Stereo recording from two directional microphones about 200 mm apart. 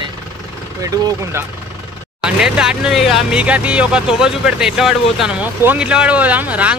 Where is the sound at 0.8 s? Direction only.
15° right (ahead or behind).